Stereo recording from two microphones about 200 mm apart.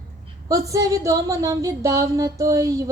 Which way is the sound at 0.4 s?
15° right (ahead or behind).